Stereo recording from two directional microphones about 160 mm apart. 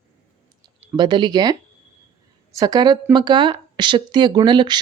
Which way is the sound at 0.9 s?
30° right (ahead or behind).